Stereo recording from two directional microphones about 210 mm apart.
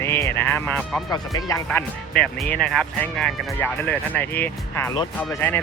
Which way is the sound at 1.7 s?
5° left (ahead or behind).